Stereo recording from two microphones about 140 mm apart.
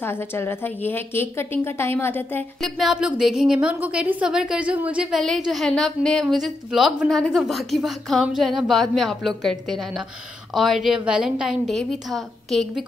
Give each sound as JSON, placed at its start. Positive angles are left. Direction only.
{"t": 0.0, "sound": "a woman's voice", "side_deg": 15}
{"t": 2.6, "sound": "a woman's voice", "side_deg": 0}